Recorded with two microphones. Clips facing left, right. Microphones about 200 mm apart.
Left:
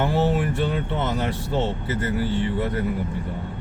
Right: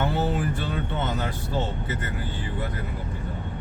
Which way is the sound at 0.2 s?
90° left.